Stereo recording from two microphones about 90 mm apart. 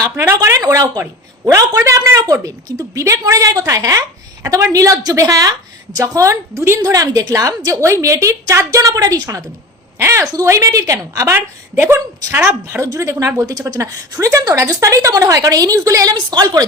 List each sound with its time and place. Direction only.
0.3 s a woman's voice: 40° right (ahead or behind)
10.0 s a woman's voice: 30° right (ahead or behind)
11.3 s a woman's voice: 20° right (ahead or behind); by 16.1 s 40° right (ahead or behind)
16.3 s speech: 50° right (ahead or behind)